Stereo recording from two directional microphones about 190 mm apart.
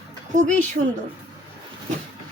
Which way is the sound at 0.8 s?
55° right (ahead or behind).